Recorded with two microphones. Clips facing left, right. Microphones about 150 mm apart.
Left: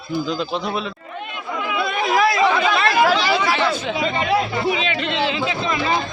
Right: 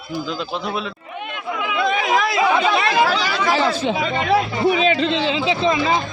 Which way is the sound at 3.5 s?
35° right (ahead or behind).